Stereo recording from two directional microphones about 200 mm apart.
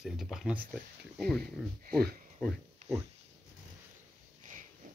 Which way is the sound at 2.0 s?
50° right (ahead or behind).